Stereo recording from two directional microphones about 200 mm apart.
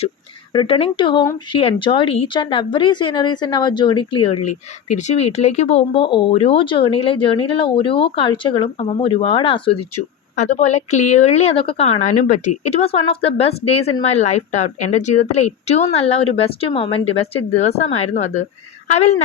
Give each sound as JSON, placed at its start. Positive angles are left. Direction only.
{"t": 0.5, "sound": "speech", "side_deg": 25}
{"t": 10.3, "sound": "a woman's voice", "side_deg": 35}